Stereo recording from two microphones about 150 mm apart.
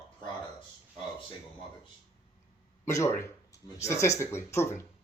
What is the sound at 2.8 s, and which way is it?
Speech, 20° left (ahead or behind).